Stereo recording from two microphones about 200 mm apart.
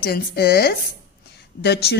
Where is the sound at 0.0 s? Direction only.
50° left (ahead or behind).